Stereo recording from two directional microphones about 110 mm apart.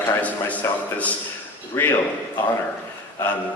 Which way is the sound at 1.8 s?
15° left (ahead or behind).